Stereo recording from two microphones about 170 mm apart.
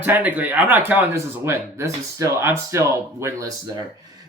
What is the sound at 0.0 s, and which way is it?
Speech, 10° right (ahead or behind).